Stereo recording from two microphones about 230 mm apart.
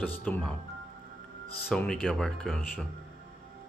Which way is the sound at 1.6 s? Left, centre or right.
Centre.